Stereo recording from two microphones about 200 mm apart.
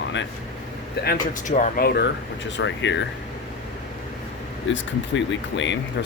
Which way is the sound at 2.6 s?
65° left (ahead or behind).